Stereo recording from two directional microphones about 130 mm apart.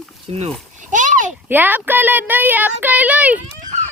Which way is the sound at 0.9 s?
80° right.